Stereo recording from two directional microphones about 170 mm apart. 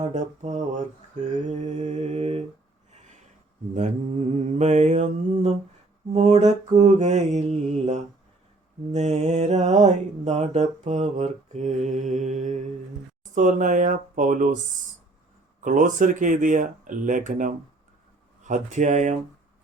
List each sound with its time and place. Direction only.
0.1 s mantra: 45° right (ahead or behind)
3.8 s mantra: 45° right (ahead or behind)
8.9 s mantra: 45° right (ahead or behind)
15.6 s mantra: 50° right (ahead or behind)